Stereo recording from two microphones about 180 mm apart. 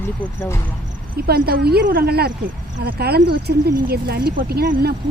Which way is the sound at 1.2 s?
60° right (ahead or behind).